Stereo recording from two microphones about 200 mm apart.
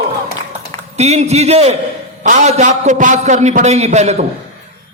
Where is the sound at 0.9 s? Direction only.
35° right (ahead or behind).